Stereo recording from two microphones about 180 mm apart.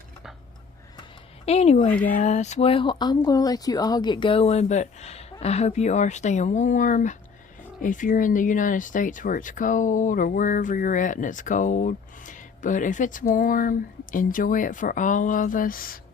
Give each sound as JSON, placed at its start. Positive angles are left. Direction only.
{"t": 1.5, "sound": "speech", "side_deg": 35}